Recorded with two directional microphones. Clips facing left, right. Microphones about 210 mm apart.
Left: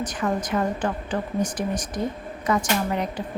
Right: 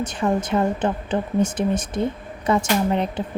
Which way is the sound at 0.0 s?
25° right (ahead or behind).